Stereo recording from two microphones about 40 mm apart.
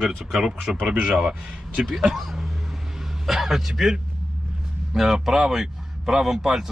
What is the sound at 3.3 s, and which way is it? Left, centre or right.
Speech, centre.